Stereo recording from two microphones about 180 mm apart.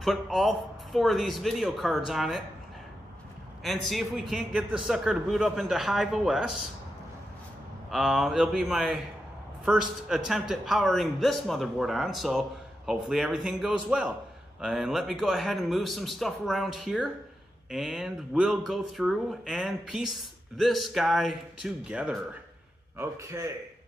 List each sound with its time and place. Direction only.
0.0 s speech: centre (ahead or behind)
3.6 s speech: centre (ahead or behind)
7.9 s speech: centre (ahead or behind)
22.9 s a man's voice: 15° right (ahead or behind)